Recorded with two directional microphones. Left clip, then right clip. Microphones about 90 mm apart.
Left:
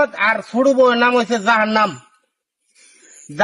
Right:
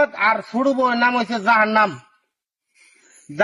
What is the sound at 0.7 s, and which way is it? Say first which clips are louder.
A man's voice: left 5 dB; 15° left (ahead or behind).